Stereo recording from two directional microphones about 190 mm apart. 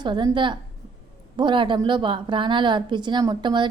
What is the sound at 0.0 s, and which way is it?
A woman's voice, 25° right (ahead or behind).